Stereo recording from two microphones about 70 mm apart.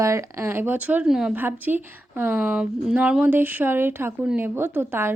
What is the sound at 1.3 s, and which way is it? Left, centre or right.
Speech, right.